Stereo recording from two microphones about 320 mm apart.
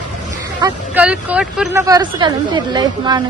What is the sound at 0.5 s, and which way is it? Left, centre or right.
Speech, centre.